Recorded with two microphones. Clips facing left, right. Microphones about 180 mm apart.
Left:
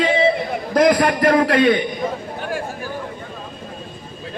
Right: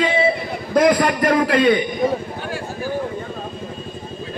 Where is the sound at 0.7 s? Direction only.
55° left (ahead or behind).